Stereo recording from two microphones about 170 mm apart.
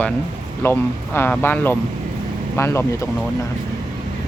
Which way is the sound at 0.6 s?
15° left (ahead or behind).